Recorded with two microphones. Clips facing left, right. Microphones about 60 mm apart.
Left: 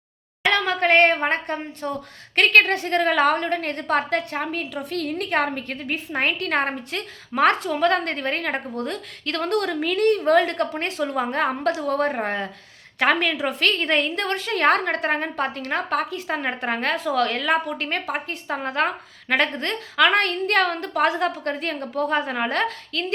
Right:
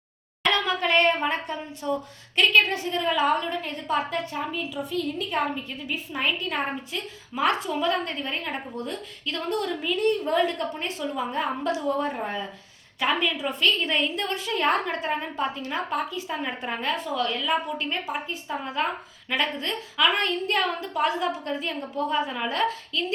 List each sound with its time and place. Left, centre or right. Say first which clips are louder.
0.5 s speech: left 5 dB; left